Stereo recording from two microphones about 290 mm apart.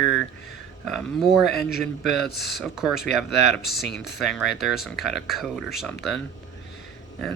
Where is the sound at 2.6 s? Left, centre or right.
Centre.